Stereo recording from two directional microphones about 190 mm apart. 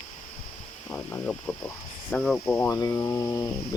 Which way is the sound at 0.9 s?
5° left (ahead or behind).